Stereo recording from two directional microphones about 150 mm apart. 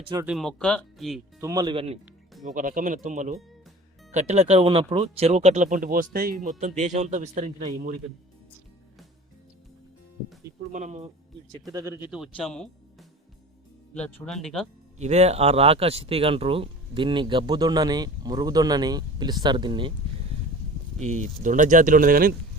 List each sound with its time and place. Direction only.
0.3 s speech: centre (ahead or behind)
1.4 s speech: 25° right (ahead or behind)
1.7 s speech: 40° right (ahead or behind)
2.4 s speech: 55° right (ahead or behind)
6.6 s speech: 50° right (ahead or behind)
10.7 s speech: 55° right (ahead or behind)
11.7 s speech: 20° right (ahead or behind); by 14.7 s 5° left (ahead or behind)
14.9 s speech: 50° right (ahead or behind); by 19.9 s 30° right (ahead or behind)
21.0 s speech: 55° right (ahead or behind); by 22.4 s 70° right (ahead or behind)